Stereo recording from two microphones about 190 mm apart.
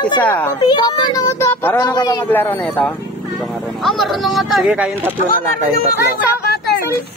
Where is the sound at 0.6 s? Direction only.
25° left (ahead or behind).